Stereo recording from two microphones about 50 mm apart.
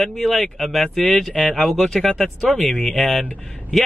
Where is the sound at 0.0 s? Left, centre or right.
Centre.